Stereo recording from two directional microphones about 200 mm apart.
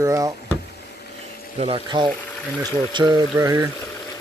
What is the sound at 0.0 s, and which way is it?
Speech, 15° right (ahead or behind).